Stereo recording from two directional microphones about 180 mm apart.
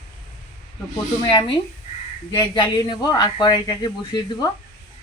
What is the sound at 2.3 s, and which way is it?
Speech, 20° left (ahead or behind).